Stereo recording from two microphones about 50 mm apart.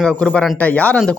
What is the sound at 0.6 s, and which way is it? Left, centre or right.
Speech, left.